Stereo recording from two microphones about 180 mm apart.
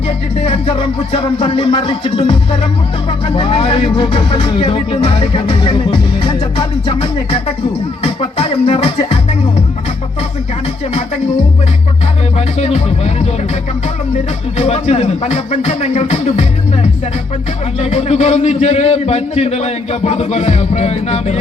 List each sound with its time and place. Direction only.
0.3 s speech: 35° left (ahead or behind)
12.4 s speech: 35° left (ahead or behind)
14.6 s speech: 35° left (ahead or behind)
17.7 s speech: 35° left (ahead or behind)